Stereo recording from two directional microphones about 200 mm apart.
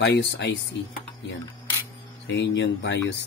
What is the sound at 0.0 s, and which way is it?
Speech, 60° left (ahead or behind).